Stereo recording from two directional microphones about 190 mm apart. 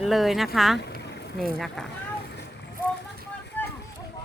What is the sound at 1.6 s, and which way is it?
Speech, centre (ahead or behind).